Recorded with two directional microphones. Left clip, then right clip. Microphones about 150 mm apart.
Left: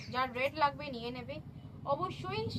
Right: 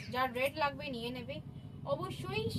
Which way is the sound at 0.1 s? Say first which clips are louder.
Even; 40° right (ahead or behind).